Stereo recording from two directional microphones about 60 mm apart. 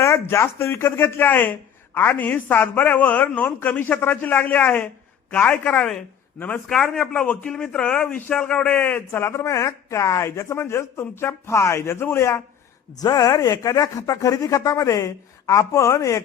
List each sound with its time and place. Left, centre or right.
0.0 s a woman's voice: left; by 6.0 s centre
7.1 s a man's voice: left
8.7 s speech: left
13.0 s speech: left